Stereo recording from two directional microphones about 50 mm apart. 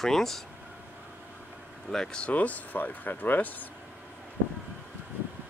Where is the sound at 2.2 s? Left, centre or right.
Left.